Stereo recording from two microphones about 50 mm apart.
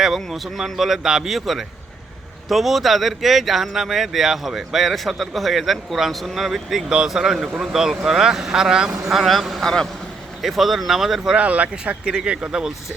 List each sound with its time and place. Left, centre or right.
0.2 s speech: centre
9.1 s speech: centre
9.6 s a man's voice: centre
10.4 s speech: centre
11.3 s speech: right